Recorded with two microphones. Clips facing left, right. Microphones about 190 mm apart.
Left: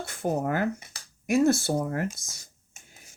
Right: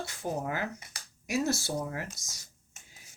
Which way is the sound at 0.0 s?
55° left (ahead or behind).